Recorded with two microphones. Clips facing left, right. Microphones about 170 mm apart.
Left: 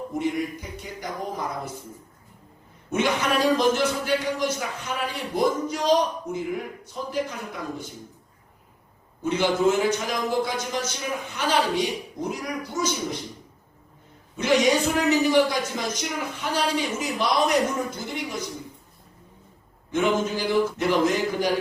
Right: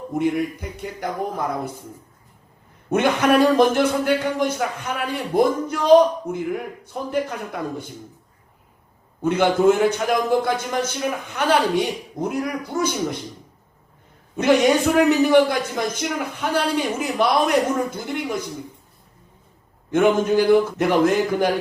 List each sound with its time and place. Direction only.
0.1 s a sound: 55° right (ahead or behind)
2.9 s a man's voice: 55° right (ahead or behind)
9.2 s a man's voice: 55° right (ahead or behind)
14.3 s a man's voice: 55° right (ahead or behind)
19.9 s a man's voice: 55° right (ahead or behind)